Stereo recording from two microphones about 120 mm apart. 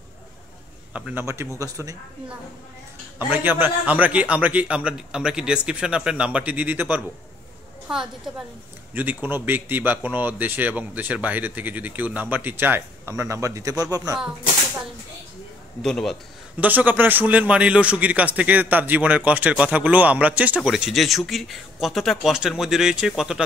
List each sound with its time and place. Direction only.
0.9 s a man's voice: 10° right (ahead or behind)
1.2 s speech: 25° right (ahead or behind)
3.2 s a man's voice: 15° right (ahead or behind)
8.9 s a man's voice: 15° right (ahead or behind)
15.8 s speech: 5° left (ahead or behind)
16.5 s a man's voice: 15° right (ahead or behind)